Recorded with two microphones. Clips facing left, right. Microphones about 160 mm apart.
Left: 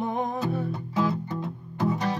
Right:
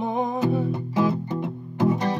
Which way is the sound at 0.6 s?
20° right (ahead or behind).